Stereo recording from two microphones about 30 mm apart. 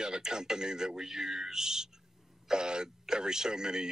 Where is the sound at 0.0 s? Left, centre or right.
Right.